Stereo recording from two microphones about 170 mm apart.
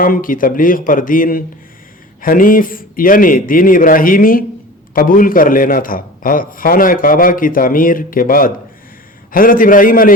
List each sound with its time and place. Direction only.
0.0 s a man's voice: 55° left (ahead or behind)